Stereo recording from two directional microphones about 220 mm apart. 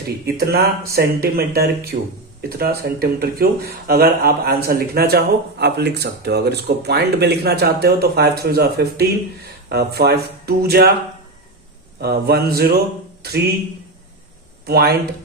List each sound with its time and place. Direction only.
0.3 s speech: 45° right (ahead or behind)
11.9 s speech: 45° right (ahead or behind)
14.7 s speech: 45° right (ahead or behind)